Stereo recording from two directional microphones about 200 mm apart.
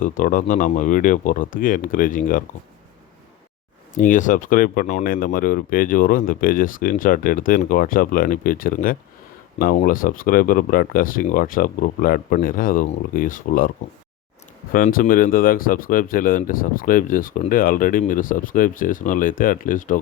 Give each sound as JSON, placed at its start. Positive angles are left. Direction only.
{"t": 0.0, "sound": "speech", "side_deg": 40}
{"t": 3.9, "sound": "speech", "side_deg": 40}
{"t": 14.7, "sound": "speech", "side_deg": 45}